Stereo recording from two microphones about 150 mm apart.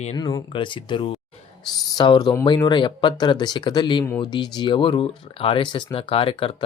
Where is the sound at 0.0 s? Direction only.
45° left (ahead or behind).